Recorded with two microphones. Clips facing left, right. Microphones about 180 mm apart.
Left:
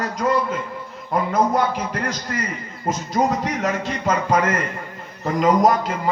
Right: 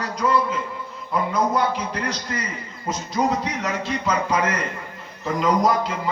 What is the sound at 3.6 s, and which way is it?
A man's voice, 50° left (ahead or behind).